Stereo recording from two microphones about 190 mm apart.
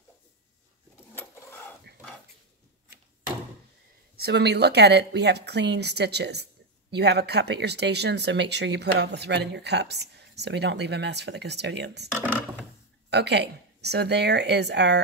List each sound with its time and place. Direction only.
4.2 s speech: 60° right (ahead or behind)
13.1 s speech: 60° right (ahead or behind)